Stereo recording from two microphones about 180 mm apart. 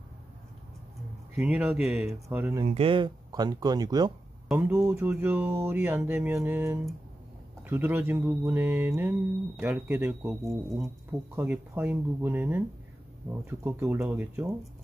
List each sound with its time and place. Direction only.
1.3 s speech: 10° right (ahead or behind)
2.2 s speech: 15° right (ahead or behind)
2.6 s speech: 30° right (ahead or behind); by 10.3 s 15° right (ahead or behind)
10.4 s speech: centre (ahead or behind)
11.1 s speech: 10° right (ahead or behind)